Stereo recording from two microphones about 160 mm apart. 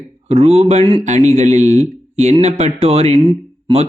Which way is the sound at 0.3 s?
40° right (ahead or behind).